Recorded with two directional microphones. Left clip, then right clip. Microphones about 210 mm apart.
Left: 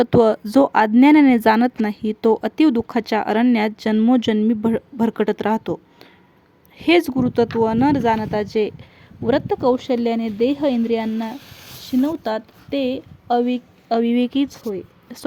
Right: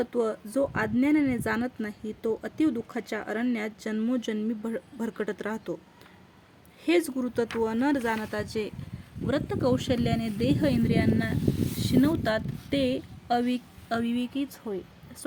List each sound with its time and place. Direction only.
0.0 s speech: 45° left (ahead or behind)
6.7 s a woman's voice: 40° left (ahead or behind)